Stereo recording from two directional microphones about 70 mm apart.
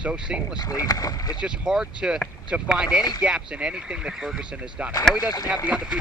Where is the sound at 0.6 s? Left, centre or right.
Left.